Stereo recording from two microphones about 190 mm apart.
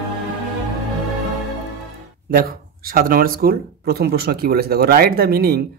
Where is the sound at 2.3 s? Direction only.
50° right (ahead or behind).